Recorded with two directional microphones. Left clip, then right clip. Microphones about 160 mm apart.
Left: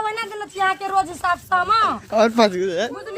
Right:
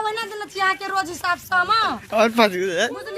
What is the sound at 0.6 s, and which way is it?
A woman's voice, 20° left (ahead or behind).